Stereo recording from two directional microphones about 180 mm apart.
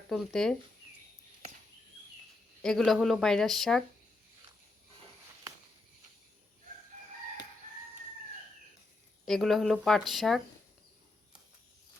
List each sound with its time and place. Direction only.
0.1 s speech: centre (ahead or behind)
2.6 s speech: 5° left (ahead or behind)
9.2 s speech: centre (ahead or behind)